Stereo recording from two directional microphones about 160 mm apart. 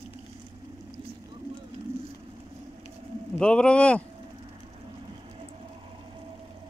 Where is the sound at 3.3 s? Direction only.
5° left (ahead or behind).